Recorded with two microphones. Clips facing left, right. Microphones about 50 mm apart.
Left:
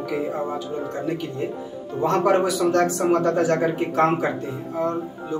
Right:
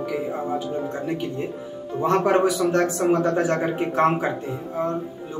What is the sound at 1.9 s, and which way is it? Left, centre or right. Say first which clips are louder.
Speech: even; right.